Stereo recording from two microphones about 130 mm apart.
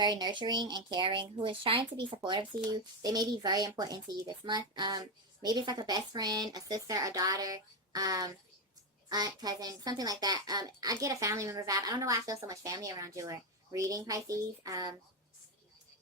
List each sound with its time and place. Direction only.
0.0 s a woman's voice: 35° right (ahead or behind)